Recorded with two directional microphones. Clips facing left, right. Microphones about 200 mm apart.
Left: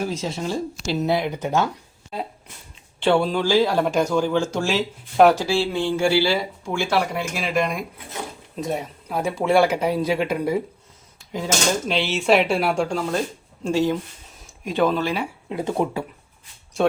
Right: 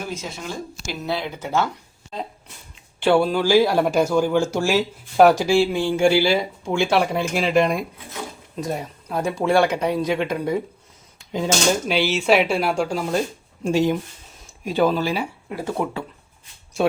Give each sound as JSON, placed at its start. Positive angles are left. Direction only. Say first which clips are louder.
{"t": 0.0, "sound": "speech", "louder": "left 5 dB", "side_deg": 35}
{"t": 3.0, "sound": "speech", "louder": "right 2 dB", "side_deg": -5}
{"t": 8.6, "sound": "speech", "louder": "left 1 dB", "side_deg": 0}
{"t": 11.9, "sound": "speech", "louder": "left 2 dB", "side_deg": -5}
{"t": 13.0, "sound": "speech", "louder": "right 1 dB", "side_deg": -10}
{"t": 14.6, "sound": "speech", "louder": "right 1 dB", "side_deg": -5}
{"t": 15.4, "sound": "speech", "louder": "left 5 dB", "side_deg": 20}